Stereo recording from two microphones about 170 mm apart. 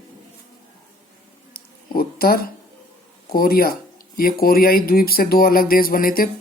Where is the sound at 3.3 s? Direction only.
60° left (ahead or behind).